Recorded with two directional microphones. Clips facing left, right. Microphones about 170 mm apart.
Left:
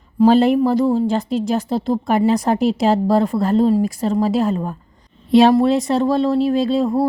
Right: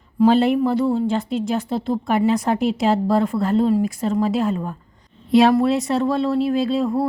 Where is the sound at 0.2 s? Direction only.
40° left (ahead or behind).